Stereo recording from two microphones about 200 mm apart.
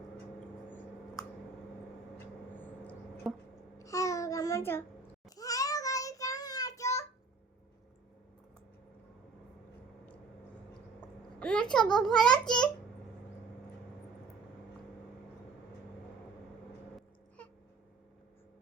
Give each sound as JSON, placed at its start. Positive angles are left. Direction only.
{"t": 3.3, "sound": "a sound", "side_deg": 0}
{"t": 3.8, "sound": "babbling", "side_deg": 15}
{"t": 5.4, "sound": "child singing", "side_deg": 15}
{"t": 11.3, "sound": "a child's voice", "side_deg": 5}